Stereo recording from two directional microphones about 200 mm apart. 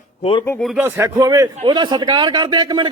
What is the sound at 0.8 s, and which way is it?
A man's voice, 15° right (ahead or behind).